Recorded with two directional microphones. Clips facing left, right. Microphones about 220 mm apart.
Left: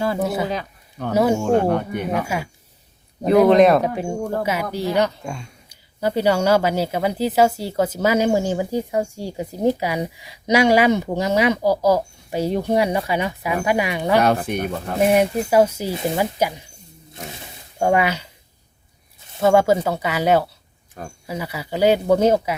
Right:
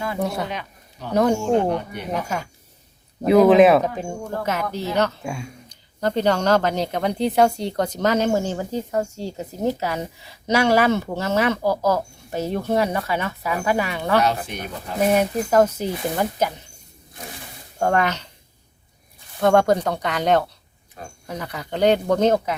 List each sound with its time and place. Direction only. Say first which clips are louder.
0.2 s speech: left 3 dB; 5° left (ahead or behind)
1.5 s speech: left 2 dB; 50° left (ahead or behind)
2.2 s speech: left 2 dB; 10° left (ahead or behind)
3.4 s speech: even; 5° right (ahead or behind)
4.4 s speech: left 2 dB; 10° left (ahead or behind)
5.2 s speech: right 1 dB; 5° right (ahead or behind)
5.6 s speech: left 1 dB; 10° left (ahead or behind)
14.2 s speech: left 4 dB; 50° left (ahead or behind)
15.1 s speech: left 1 dB; 10° left (ahead or behind)
17.7 s speech: left 2 dB; 10° left (ahead or behind)
19.4 s speech: left 1 dB; 5° left (ahead or behind)